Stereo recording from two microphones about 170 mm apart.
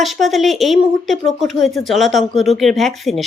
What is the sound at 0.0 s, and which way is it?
Speech, centre (ahead or behind).